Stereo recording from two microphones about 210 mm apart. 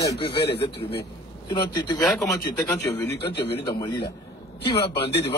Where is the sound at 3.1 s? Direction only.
50° left (ahead or behind).